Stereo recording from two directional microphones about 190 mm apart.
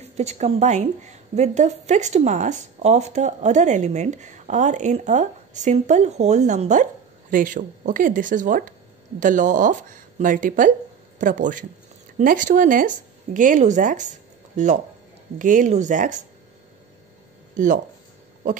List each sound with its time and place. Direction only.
0.0 s a woman's voice: 35° right (ahead or behind)
17.6 s speech: 40° right (ahead or behind)
18.4 s owl: 40° right (ahead or behind)